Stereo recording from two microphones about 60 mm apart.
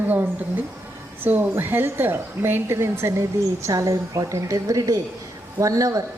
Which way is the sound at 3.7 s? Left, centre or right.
Right.